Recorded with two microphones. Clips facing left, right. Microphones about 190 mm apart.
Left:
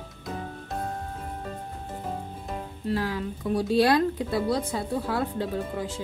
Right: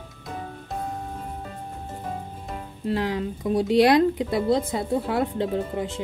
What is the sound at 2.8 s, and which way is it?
A woman's voice, 20° right (ahead or behind).